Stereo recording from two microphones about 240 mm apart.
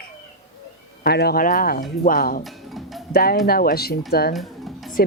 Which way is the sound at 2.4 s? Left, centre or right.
Centre.